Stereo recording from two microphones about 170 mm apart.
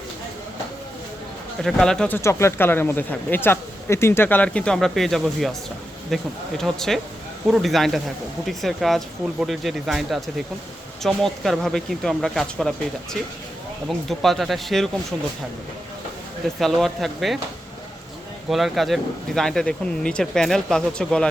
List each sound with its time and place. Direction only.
1.6 s speech: 5° left (ahead or behind)
16.6 s speech: centre (ahead or behind)
18.4 s speech: centre (ahead or behind)